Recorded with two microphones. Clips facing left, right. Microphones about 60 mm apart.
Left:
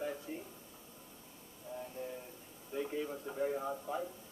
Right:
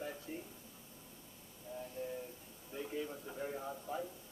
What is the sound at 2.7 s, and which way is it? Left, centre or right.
A man's voice, centre.